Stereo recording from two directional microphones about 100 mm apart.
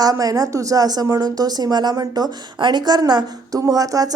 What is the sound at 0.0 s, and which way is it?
A woman's voice, 35° right (ahead or behind).